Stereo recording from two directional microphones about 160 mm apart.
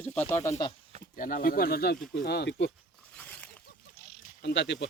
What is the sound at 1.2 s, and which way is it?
Speech, 60° left (ahead or behind).